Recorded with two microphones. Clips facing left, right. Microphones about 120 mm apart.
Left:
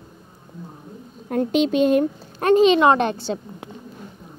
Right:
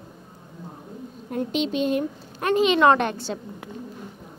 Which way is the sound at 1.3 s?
55° left (ahead or behind).